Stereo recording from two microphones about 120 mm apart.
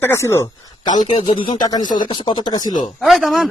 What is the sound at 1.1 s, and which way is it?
Speech, 50° left (ahead or behind).